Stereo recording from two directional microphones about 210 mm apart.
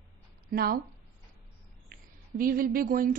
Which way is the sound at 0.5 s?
45° right (ahead or behind).